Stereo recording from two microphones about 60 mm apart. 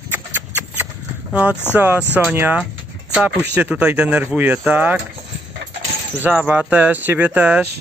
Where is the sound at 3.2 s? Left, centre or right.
Right.